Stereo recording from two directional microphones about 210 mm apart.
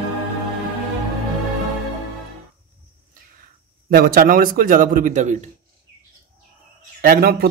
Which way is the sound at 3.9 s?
45° right (ahead or behind).